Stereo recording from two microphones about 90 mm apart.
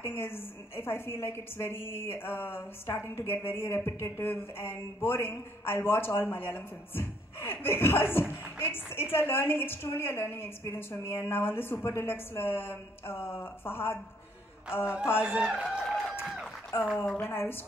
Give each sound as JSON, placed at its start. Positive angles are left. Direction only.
{"t": 0.0, "sound": "a woman's voice", "side_deg": 25}
{"t": 15.2, "sound": "a man's voice", "side_deg": -10}
{"t": 15.7, "sound": "a sound", "side_deg": -5}
{"t": 17.2, "sound": "a woman's voice", "side_deg": 25}